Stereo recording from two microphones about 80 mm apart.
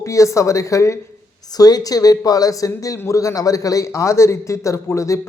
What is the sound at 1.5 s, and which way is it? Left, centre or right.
A man's voice, left.